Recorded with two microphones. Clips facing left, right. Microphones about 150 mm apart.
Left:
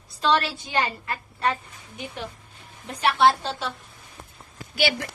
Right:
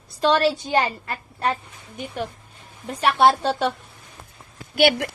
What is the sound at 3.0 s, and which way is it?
Speech, 50° right (ahead or behind).